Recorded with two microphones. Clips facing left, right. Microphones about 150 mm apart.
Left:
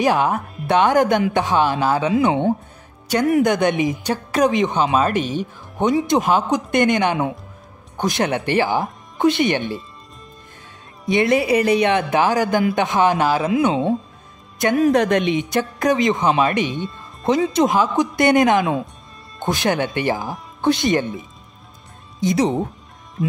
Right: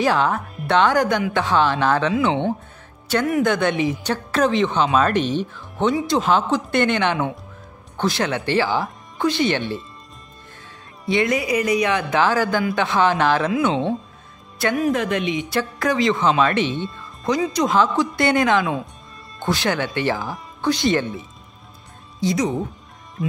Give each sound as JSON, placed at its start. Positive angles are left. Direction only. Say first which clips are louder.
{"t": 0.0, "sound": "speech", "louder": "left 1 dB", "side_deg": 15}
{"t": 3.3, "sound": "speech", "louder": "left 4 dB", "side_deg": 20}
{"t": 11.1, "sound": "speech", "louder": "left 3 dB", "side_deg": 25}
{"t": 14.9, "sound": "speech", "louder": "left 5 dB", "side_deg": 70}
{"t": 15.5, "sound": "speech", "louder": "left 1 dB", "side_deg": 20}
{"t": 17.2, "sound": "speech", "louder": "left 3 dB", "side_deg": 25}
{"t": 22.2, "sound": "speech", "louder": "left 3 dB", "side_deg": 30}